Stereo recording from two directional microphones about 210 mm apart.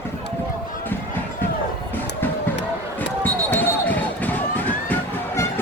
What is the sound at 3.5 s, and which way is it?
Basketball bounce, 10° left (ahead or behind).